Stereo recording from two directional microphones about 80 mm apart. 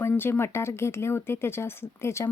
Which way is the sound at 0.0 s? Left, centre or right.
Left.